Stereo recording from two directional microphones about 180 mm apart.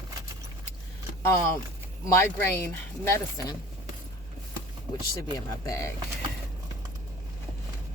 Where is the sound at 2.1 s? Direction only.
15° left (ahead or behind).